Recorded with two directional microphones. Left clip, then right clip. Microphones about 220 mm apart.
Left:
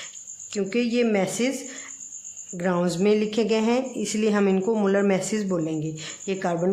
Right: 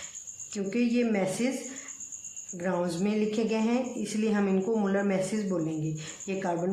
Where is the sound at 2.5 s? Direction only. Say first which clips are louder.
Left 5 dB; 45° left (ahead or behind).